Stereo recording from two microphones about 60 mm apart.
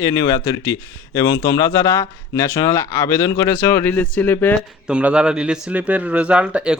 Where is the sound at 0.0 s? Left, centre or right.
Left.